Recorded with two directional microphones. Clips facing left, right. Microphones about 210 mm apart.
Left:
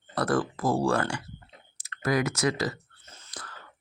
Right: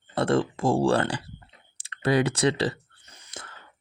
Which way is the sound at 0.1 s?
25° right (ahead or behind).